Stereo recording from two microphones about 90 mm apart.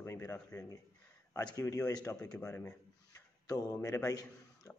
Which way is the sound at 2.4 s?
30° left (ahead or behind).